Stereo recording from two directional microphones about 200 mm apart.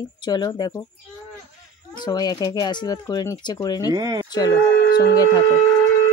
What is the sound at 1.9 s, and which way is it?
Speech, 20° left (ahead or behind).